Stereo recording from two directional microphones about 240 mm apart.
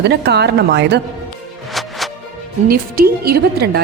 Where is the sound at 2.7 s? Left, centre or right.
Right.